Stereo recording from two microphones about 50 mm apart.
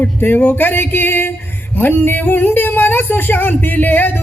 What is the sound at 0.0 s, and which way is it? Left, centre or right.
Singing, left.